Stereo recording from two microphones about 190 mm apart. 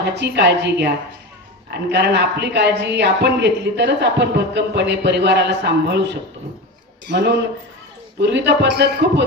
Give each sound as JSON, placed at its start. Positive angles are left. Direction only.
{"t": 0.0, "sound": "a woman's voice", "side_deg": -60}